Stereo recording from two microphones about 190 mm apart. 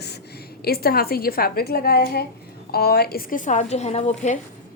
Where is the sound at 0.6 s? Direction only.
55° left (ahead or behind); by 4.4 s 35° left (ahead or behind).